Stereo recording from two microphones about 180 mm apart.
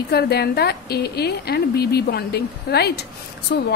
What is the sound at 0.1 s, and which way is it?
A woman's voice, 60° left (ahead or behind).